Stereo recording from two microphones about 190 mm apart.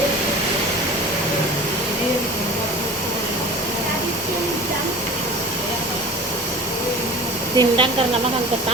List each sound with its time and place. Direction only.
7.5 s speech: 20° right (ahead or behind)